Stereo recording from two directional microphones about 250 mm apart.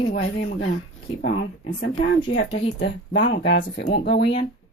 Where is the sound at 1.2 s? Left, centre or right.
Left.